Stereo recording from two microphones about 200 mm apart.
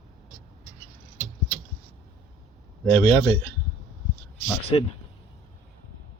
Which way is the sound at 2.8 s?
10° left (ahead or behind).